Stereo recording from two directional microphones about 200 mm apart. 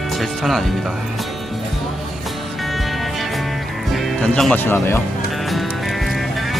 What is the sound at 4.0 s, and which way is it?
Speech, centre (ahead or behind).